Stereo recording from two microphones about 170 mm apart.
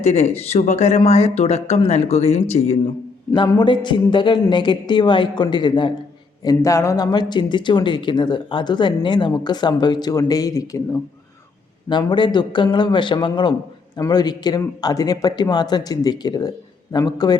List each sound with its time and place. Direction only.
0.0 s speech: 40° left (ahead or behind)
3.3 s speech: 25° left (ahead or behind)
11.9 s speech: 25° left (ahead or behind)